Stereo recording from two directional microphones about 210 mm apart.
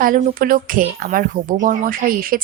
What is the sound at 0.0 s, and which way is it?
A woman's voice, 40° right (ahead or behind).